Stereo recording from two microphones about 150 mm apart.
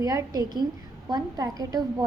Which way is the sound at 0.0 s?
25° right (ahead or behind).